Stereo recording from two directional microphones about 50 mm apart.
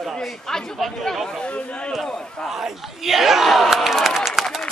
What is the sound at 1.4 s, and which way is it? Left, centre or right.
Speech, left.